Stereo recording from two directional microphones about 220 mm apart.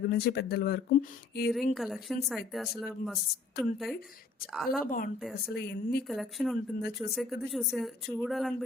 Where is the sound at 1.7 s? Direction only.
Centre (ahead or behind).